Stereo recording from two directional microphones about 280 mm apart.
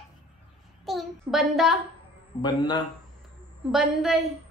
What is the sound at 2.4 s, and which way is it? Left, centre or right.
Speech, centre.